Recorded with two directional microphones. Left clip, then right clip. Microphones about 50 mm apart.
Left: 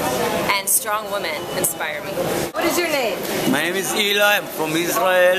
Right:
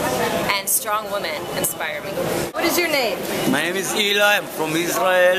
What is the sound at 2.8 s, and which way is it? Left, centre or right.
Speech, right.